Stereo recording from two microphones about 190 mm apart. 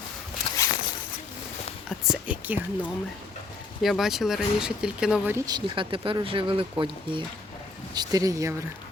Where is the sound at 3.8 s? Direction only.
Centre (ahead or behind); by 8.5 s 15° right (ahead or behind).